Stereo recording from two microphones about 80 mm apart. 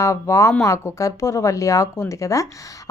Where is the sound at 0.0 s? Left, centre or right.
Left.